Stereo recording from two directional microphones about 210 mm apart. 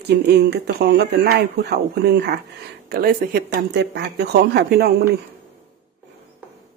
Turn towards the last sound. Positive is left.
turn(degrees=-50)  # may be behind; listen again after turning